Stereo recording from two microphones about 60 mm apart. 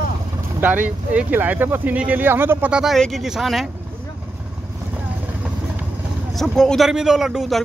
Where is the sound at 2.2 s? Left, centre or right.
Right.